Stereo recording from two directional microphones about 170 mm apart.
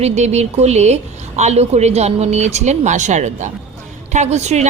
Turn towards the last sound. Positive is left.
turn(degrees=-40)  # may be behind; listen again after turning